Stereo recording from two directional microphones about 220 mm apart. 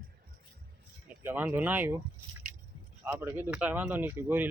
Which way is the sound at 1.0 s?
10° right (ahead or behind).